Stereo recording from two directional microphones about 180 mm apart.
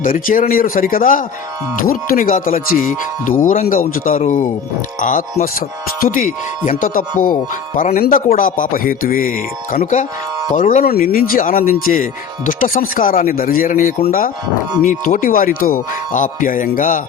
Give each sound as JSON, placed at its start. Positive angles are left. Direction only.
{"t": 0.0, "sound": "speech", "side_deg": 50}